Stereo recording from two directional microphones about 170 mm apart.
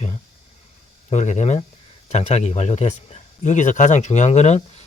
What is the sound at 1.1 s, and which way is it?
A man's voice, 45° left (ahead or behind).